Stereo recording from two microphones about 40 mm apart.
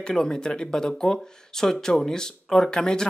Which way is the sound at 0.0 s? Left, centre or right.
Centre.